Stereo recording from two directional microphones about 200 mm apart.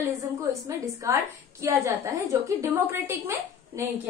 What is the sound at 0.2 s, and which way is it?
A woman's voice, 15° right (ahead or behind).